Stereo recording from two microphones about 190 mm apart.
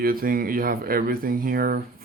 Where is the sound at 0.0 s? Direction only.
50° right (ahead or behind).